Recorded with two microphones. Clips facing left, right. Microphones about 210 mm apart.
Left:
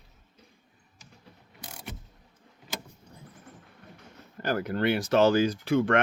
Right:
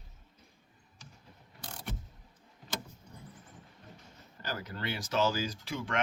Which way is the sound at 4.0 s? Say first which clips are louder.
Left 9 dB; 55° left (ahead or behind).